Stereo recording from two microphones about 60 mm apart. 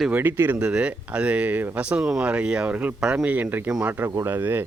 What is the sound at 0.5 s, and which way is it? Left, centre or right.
Speech, centre.